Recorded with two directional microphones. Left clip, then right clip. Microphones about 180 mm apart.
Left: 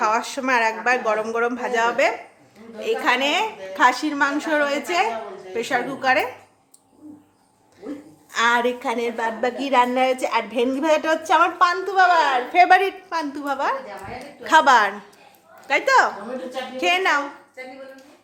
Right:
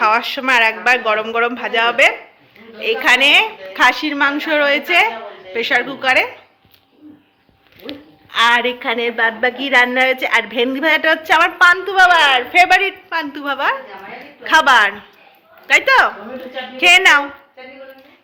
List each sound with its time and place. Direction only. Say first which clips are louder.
0.0 s a woman's voice: right 6 dB; 10° left (ahead or behind)
8.3 s a woman's voice: right 5 dB; 15° left (ahead or behind)
13.1 s a woman's voice: right 4 dB; 20° left (ahead or behind); by 17.2 s centre (ahead or behind)